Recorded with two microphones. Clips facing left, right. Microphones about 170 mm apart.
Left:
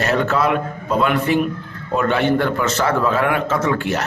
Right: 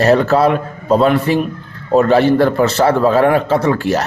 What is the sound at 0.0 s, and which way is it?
A man's voice, 35° right (ahead or behind).